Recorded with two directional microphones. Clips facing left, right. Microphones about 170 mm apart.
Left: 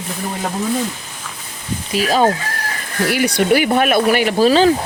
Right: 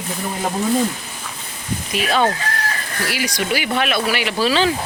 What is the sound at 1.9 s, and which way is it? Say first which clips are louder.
Chicken: left 3 dB; 40° left (ahead or behind).